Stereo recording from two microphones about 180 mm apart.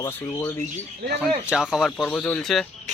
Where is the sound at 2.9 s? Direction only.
40° right (ahead or behind).